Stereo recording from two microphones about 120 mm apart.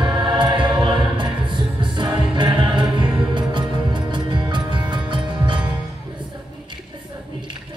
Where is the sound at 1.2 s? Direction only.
45° right (ahead or behind).